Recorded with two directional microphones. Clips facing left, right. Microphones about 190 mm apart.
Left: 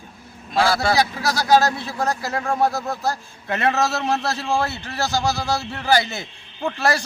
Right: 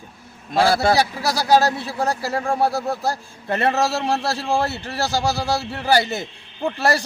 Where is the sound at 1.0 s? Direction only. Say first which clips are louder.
Even; 15° right (ahead or behind).